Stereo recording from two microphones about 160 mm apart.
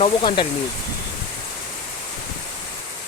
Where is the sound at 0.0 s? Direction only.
30° left (ahead or behind).